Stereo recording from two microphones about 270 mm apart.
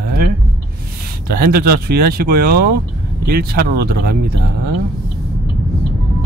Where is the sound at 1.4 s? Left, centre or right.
Right.